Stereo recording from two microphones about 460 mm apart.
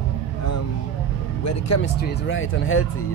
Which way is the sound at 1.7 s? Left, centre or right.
Left.